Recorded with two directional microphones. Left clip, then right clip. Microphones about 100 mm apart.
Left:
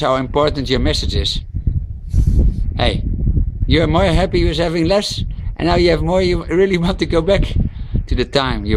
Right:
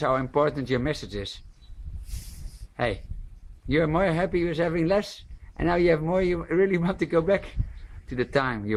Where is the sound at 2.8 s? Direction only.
25° left (ahead or behind).